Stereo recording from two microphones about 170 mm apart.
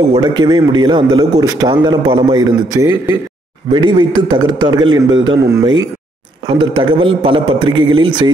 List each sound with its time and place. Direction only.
0.1 s a man's voice: 25° right (ahead or behind)
3.7 s a man's voice: 25° right (ahead or behind)
6.4 s a man's voice: 30° right (ahead or behind)